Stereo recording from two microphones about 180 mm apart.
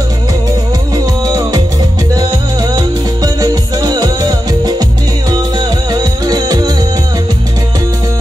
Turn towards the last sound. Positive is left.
turn(degrees=-25)  # may be behind; listen again after turning